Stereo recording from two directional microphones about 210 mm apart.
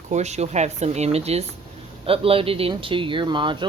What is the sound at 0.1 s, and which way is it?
Speech, 30° right (ahead or behind).